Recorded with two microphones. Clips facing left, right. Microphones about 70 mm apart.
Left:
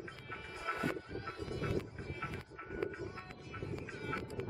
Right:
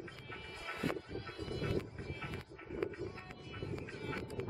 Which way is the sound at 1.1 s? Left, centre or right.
Centre.